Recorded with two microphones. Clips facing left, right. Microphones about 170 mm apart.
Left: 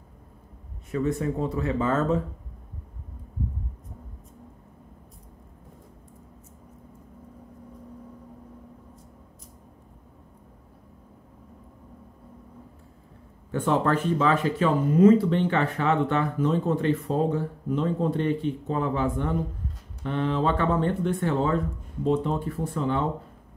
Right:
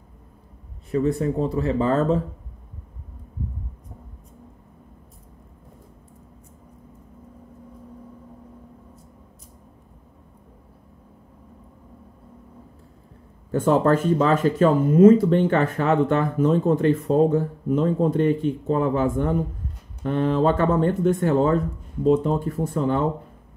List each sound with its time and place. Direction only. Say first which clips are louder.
0.9 s speech: right 4 dB; 35° right (ahead or behind)
13.5 s speech: right 5 dB; 40° right (ahead or behind)